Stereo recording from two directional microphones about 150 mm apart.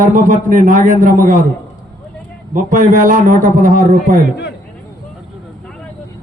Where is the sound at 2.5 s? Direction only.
60° right (ahead or behind).